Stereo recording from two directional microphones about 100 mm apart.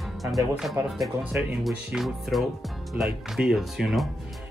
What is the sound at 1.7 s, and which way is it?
Speech, centre (ahead or behind).